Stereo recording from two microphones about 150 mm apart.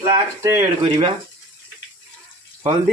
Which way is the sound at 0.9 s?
40° right (ahead or behind).